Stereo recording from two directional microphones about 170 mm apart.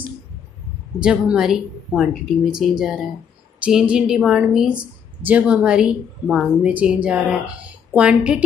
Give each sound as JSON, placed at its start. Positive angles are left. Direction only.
{"t": 1.0, "sound": "a woman's voice", "side_deg": -5}